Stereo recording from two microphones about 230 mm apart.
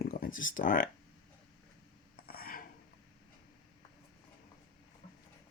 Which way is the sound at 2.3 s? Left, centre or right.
Left.